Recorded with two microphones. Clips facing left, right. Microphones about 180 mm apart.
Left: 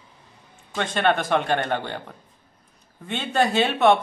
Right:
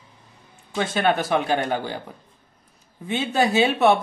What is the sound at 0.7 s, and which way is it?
A man's voice, 5° right (ahead or behind).